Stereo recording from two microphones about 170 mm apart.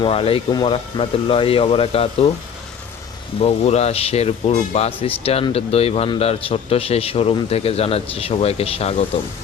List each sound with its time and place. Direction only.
0.0 s speech: 35° left (ahead or behind)
3.4 s speech: 40° left (ahead or behind)